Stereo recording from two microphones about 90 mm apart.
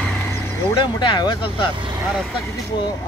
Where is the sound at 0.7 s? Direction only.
60° left (ahead or behind).